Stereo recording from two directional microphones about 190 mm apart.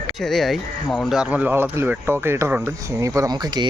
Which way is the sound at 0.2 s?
Centre (ahead or behind).